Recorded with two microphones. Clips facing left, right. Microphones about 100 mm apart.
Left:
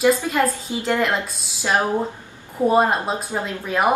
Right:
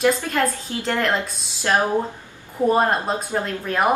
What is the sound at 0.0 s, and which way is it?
A woman's voice, 5° left (ahead or behind).